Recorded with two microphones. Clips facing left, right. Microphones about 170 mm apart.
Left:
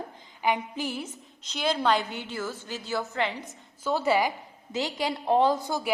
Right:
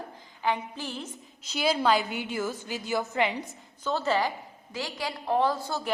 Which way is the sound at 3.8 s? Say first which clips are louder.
Left 2 dB; 10° left (ahead or behind).